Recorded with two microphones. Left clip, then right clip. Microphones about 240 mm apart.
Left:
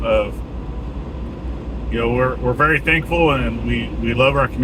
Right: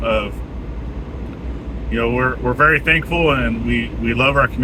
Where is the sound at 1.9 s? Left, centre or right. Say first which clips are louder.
Even; centre.